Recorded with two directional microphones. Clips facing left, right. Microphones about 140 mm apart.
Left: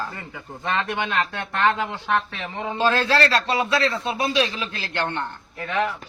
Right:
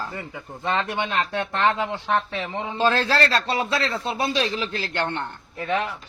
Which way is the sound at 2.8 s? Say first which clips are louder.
Left 1 dB; 35° right (ahead or behind).